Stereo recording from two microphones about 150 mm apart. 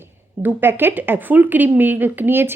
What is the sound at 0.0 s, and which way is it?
Speech, 15° right (ahead or behind).